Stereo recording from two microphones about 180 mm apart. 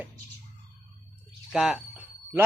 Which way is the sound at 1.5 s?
5° right (ahead or behind).